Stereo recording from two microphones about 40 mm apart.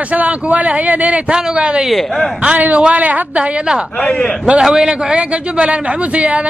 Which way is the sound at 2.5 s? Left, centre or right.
Right.